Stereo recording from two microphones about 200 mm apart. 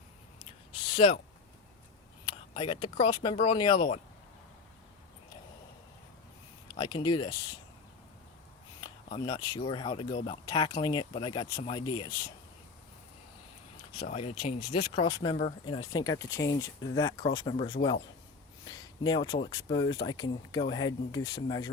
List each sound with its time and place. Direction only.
0.9 s speech: 25° left (ahead or behind)
2.2 s speech: 25° left (ahead or behind)
6.7 s speech: 20° left (ahead or behind)
9.0 s speech: 25° left (ahead or behind)
14.0 s speech: 30° left (ahead or behind)